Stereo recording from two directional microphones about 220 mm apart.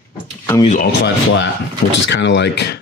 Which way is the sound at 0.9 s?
55° left (ahead or behind).